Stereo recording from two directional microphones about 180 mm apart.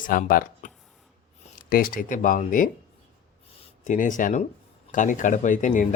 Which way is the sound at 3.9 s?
45° left (ahead or behind).